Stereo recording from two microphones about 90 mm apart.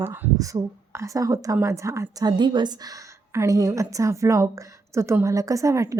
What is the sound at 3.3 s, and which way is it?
A woman's voice, 35° right (ahead or behind).